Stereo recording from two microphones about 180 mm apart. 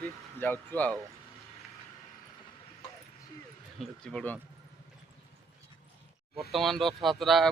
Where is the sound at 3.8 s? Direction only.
5° left (ahead or behind).